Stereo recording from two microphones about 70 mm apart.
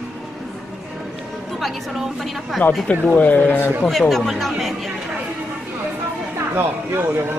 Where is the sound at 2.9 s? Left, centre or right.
Left.